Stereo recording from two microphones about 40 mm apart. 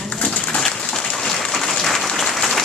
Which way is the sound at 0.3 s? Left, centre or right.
Left.